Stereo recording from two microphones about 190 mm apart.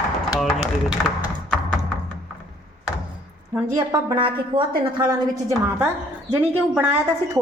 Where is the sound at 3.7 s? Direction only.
20° right (ahead or behind).